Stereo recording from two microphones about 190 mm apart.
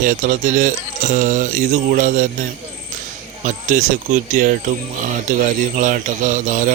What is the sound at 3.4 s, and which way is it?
Speech, 40° right (ahead or behind).